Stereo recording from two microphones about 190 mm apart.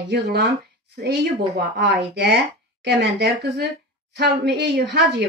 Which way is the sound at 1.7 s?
60° right (ahead or behind).